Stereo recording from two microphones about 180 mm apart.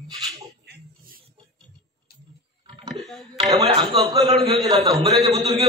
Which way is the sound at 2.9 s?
Centre (ahead or behind).